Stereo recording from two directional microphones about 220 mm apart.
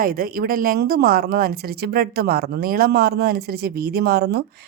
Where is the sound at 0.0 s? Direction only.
40° right (ahead or behind).